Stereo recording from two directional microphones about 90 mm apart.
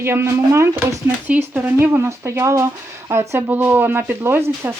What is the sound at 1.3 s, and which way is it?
Speech, 20° right (ahead or behind).